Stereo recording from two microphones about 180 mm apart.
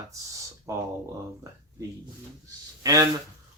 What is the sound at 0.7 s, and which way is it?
Speech, 15° right (ahead or behind).